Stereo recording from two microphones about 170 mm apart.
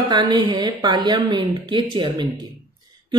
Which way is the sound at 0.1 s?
25° right (ahead or behind).